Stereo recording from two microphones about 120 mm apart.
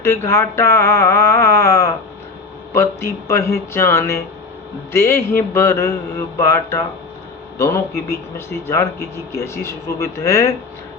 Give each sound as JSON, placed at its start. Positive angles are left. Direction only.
{"t": 0.0, "sound": "speech", "side_deg": 20}